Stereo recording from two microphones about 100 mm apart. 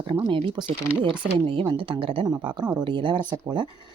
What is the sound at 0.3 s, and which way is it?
Speech, 55° right (ahead or behind).